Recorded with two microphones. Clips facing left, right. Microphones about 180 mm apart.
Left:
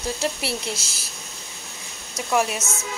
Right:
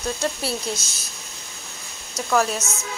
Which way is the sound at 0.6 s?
30° left (ahead or behind).